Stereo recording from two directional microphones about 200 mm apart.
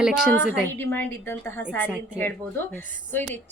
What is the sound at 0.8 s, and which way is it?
Speech, 10° left (ahead or behind).